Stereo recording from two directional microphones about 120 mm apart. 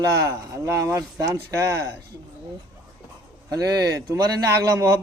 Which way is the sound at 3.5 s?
30° right (ahead or behind).